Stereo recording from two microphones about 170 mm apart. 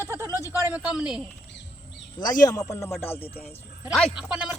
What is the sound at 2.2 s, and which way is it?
Speech, 25° left (ahead or behind).